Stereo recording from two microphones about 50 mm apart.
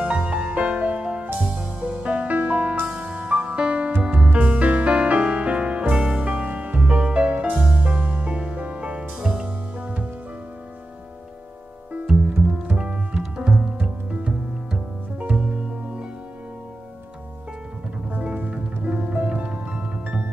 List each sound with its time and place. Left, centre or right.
0.2 s music: right
12.1 s music: centre
14.2 s music: right
18.1 s music: right